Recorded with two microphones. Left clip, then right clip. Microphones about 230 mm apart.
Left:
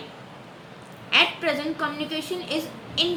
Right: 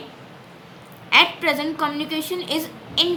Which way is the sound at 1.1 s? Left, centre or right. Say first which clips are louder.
Right 4 dB; right.